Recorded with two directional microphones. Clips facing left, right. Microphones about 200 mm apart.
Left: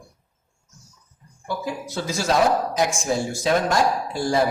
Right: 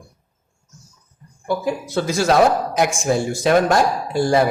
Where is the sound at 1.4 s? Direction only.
60° right (ahead or behind).